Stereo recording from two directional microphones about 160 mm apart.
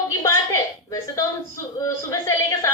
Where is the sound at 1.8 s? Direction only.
20° left (ahead or behind).